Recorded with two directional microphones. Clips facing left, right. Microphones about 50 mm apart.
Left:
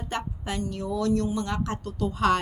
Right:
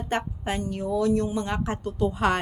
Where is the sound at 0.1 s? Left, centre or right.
Right.